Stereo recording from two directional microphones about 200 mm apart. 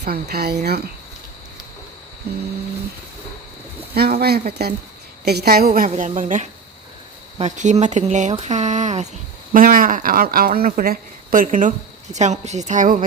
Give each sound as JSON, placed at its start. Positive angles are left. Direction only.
{"t": 0.0, "sound": "speech", "side_deg": -50}
{"t": 3.9, "sound": "speech", "side_deg": -50}